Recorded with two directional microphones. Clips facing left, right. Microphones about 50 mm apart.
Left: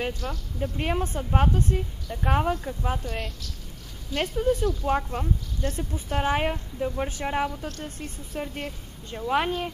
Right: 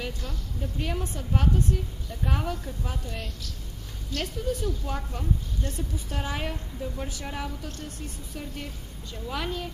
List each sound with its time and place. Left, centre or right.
0.0 s speech: left
4.2 s speech: left